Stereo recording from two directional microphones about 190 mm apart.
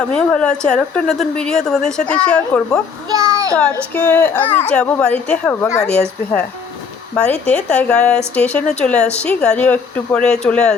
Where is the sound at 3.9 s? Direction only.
10° left (ahead or behind).